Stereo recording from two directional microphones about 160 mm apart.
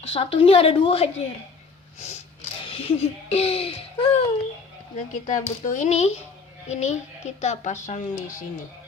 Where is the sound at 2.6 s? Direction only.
35° left (ahead or behind).